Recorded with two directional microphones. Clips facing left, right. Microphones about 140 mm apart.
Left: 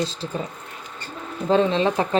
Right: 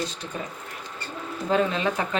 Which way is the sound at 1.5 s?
30° left (ahead or behind).